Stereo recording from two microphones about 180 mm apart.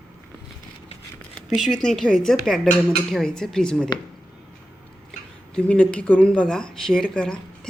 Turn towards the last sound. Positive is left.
turn(degrees=5)  # may be behind; listen again after turning